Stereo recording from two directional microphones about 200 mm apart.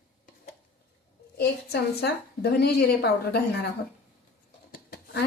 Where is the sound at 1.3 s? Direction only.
55° left (ahead or behind).